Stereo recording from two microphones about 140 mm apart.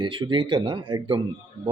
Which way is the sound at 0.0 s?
35° right (ahead or behind).